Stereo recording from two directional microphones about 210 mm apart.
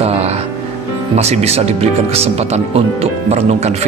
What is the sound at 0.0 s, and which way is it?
Music, 30° right (ahead or behind).